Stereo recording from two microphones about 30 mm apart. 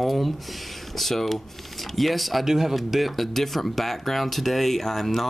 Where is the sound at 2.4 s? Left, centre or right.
Centre.